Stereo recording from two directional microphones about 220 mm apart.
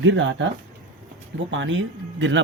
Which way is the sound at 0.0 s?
60° right (ahead or behind).